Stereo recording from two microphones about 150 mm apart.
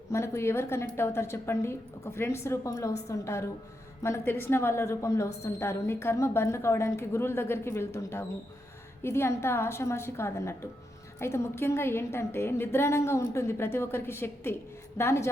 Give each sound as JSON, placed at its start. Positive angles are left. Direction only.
{"t": 0.1, "sound": "a woman's voice", "side_deg": 20}